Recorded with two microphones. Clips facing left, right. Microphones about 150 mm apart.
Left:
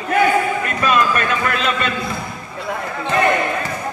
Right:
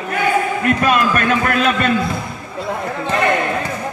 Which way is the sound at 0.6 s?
50° right (ahead or behind).